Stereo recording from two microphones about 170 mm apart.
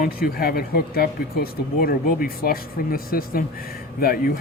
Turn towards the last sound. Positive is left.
turn(degrees=60)  # may be behind; listen again after turning